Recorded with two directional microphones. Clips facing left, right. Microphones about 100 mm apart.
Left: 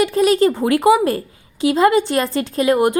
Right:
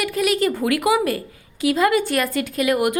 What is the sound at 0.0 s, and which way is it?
A woman's voice, 30° left (ahead or behind).